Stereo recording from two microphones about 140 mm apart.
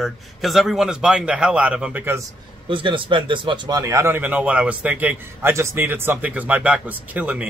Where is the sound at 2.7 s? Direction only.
35° right (ahead or behind).